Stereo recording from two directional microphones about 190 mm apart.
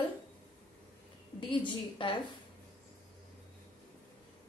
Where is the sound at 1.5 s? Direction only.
25° left (ahead or behind).